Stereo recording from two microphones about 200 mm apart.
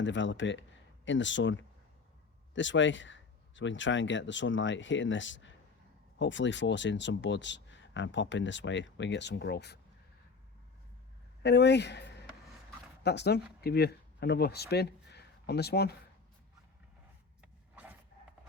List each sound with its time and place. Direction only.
0.0 s speech: 65° left (ahead or behind)
11.4 s speech: 55° left (ahead or behind)